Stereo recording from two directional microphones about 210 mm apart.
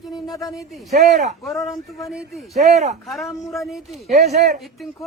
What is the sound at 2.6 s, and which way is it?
Speech, 30° right (ahead or behind).